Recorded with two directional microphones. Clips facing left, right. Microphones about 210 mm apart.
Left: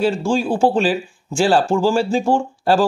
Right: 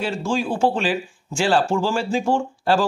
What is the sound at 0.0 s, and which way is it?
Speech, 35° left (ahead or behind).